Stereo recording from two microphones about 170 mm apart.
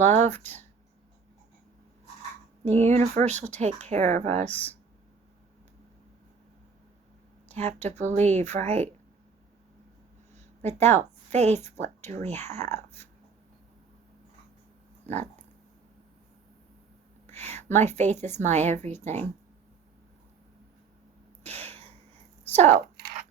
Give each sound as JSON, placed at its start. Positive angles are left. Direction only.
{"t": 0.0, "sound": "speech", "side_deg": -40}
{"t": 0.3, "sound": "speech", "side_deg": 10}
{"t": 2.7, "sound": "speech", "side_deg": -40}
{"t": 7.4, "sound": "speech", "side_deg": -40}
{"t": 10.3, "sound": "a sound", "side_deg": -40}
{"t": 11.8, "sound": "speech", "side_deg": -40}
{"t": 15.0, "sound": "speech", "side_deg": -40}
{"t": 17.2, "sound": "a sound", "side_deg": -40}
{"t": 17.7, "sound": "speech", "side_deg": -45}
{"t": 21.4, "sound": "a sound", "side_deg": -40}